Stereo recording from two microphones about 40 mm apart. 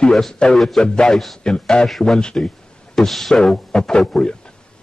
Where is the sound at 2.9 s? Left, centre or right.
Centre.